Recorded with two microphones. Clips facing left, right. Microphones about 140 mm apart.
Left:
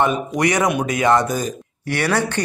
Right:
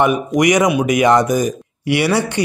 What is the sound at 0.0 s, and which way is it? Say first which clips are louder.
Speech: right 4 dB; 15° right (ahead or behind).